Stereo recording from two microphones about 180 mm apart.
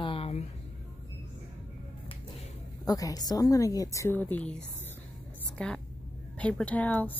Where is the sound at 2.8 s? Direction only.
20° left (ahead or behind).